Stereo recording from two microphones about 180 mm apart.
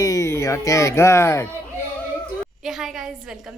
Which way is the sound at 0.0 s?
20° left (ahead or behind).